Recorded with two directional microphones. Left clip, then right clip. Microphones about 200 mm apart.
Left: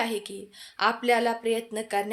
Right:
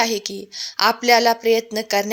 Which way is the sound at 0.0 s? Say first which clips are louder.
Right 9 dB; 40° right (ahead or behind).